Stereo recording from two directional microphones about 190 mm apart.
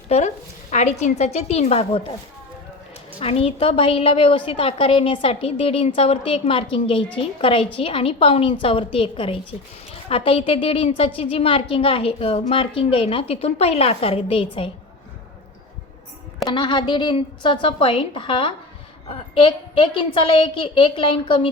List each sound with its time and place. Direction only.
0.1 s a woman's voice: 35° left (ahead or behind)
3.2 s a woman's voice: 30° left (ahead or behind)
16.5 s a woman's voice: 25° left (ahead or behind)